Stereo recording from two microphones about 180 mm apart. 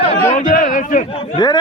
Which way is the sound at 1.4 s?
25° left (ahead or behind).